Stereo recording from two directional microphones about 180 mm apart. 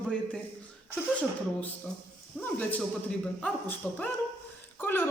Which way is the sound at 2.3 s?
10° left (ahead or behind).